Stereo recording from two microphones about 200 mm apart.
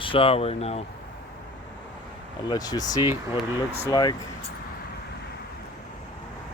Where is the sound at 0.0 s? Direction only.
25° left (ahead or behind).